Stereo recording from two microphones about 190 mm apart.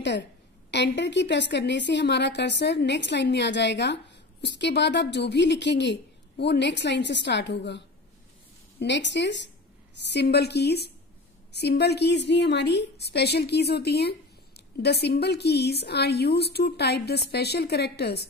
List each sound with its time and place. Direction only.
0.7 s a woman's voice: 65° left (ahead or behind)